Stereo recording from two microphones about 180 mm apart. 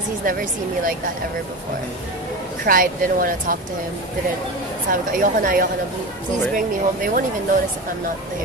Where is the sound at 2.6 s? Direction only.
50° right (ahead or behind).